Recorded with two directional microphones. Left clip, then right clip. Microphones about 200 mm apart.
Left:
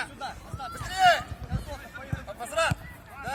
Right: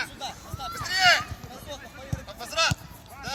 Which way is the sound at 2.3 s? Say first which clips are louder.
Right 1 dB; 25° left (ahead or behind).